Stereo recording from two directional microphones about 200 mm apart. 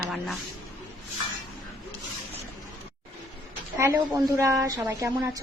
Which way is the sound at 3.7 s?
15° right (ahead or behind).